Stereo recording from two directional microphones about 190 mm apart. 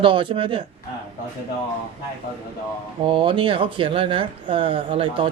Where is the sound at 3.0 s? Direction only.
25° right (ahead or behind).